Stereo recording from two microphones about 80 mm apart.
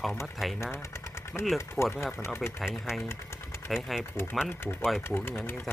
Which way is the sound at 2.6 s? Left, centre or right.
Centre.